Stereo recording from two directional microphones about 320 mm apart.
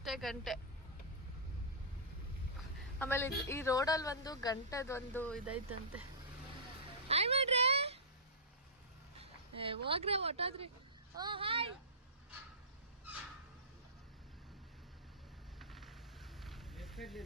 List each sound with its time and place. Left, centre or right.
0.0 s speech: centre
3.0 s a woman's voice: centre
7.1 s a child's voice: centre
9.2 s speech: centre
15.5 s a sound: centre